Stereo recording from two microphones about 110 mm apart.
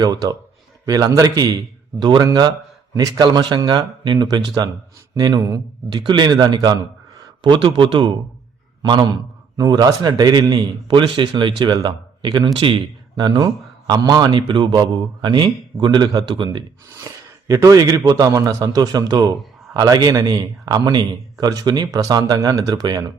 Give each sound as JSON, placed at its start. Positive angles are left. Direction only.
{"t": 0.0, "sound": "a man's voice", "side_deg": -35}
{"t": 17.1, "sound": "a sound", "side_deg": -35}
{"t": 17.5, "sound": "a man's voice", "side_deg": -30}